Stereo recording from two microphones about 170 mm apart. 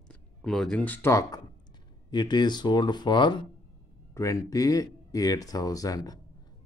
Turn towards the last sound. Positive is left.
turn(degrees=20)  # may be behind; listen again after turning